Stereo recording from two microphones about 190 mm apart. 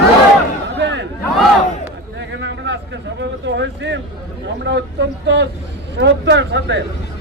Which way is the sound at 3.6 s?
70° right (ahead or behind).